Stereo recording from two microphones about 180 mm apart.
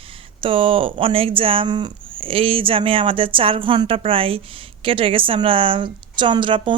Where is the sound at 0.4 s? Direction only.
30° right (ahead or behind).